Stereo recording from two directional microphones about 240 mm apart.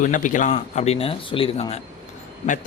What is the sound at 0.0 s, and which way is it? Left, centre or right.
Speech, left.